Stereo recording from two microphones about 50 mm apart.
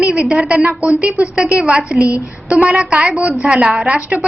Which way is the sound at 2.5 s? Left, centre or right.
Right.